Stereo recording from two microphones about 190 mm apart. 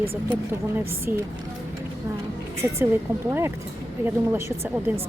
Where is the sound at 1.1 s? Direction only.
50° right (ahead or behind).